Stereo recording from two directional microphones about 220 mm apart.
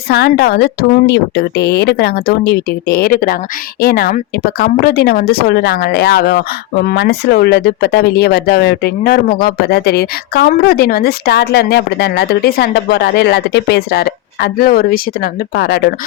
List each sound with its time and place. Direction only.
0.1 s speech: 45° left (ahead or behind)